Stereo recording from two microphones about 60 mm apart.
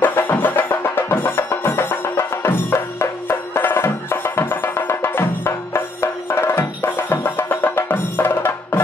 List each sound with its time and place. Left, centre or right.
0.0 s music: left